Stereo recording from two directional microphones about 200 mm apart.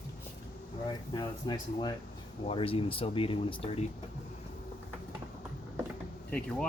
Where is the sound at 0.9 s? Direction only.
20° left (ahead or behind).